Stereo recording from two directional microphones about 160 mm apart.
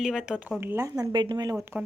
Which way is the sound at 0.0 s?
5° right (ahead or behind).